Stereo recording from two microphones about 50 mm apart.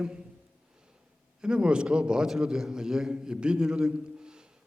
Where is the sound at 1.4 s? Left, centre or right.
Centre.